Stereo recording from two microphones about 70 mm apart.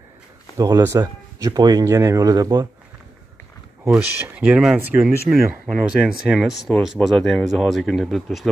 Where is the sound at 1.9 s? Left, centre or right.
Right.